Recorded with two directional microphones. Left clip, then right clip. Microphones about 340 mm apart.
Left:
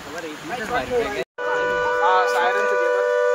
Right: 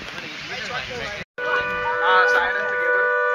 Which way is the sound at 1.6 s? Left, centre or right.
Left.